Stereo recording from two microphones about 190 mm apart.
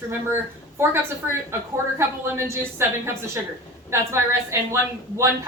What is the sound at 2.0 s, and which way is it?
A woman's voice, 15° right (ahead or behind).